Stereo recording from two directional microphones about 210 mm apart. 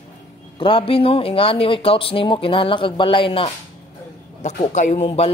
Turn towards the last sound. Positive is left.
turn(degrees=30)  # may be behind; listen again after turning